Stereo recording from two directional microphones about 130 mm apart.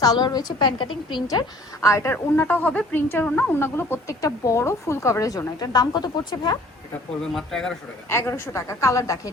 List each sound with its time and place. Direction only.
0.0 s a woman's voice: 30° left (ahead or behind)
7.3 s speech: 5° left (ahead or behind)
8.1 s a woman's voice: 20° left (ahead or behind)